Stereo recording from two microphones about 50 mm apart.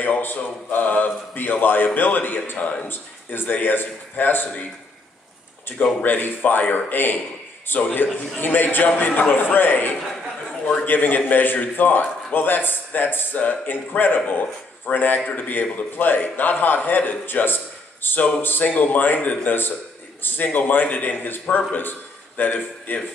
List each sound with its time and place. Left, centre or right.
0.2 s a man's voice: left
2.6 s speech: left
2.9 s a man's voice: left
6.0 s a man's voice: left